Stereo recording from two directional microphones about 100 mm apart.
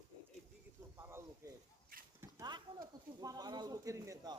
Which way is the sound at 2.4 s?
45° right (ahead or behind).